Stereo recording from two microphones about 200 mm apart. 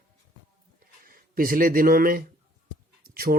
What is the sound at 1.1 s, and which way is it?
Speech, 45° right (ahead or behind).